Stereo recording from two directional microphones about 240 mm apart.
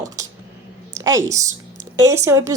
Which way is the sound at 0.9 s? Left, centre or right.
Centre.